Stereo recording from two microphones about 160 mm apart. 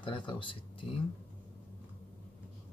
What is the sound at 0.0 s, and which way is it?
Speech, 30° left (ahead or behind).